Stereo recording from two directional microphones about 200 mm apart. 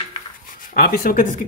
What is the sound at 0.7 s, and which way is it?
Speech, 50° left (ahead or behind).